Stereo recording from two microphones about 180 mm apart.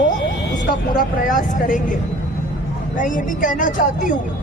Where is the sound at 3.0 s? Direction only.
45° left (ahead or behind).